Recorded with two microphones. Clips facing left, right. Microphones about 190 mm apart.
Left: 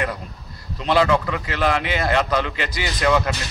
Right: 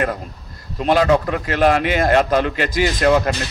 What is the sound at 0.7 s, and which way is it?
A man's voice, 45° right (ahead or behind).